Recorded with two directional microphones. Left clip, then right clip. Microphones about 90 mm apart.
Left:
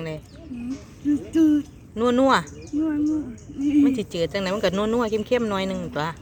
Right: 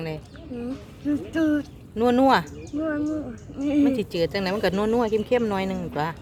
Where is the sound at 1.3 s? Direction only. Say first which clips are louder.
Left 5 dB; 15° right (ahead or behind).